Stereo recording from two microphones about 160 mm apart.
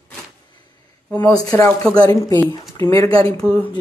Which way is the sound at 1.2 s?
25° left (ahead or behind).